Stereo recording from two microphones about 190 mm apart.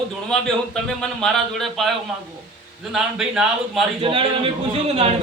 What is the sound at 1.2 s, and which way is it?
Speech, centre (ahead or behind).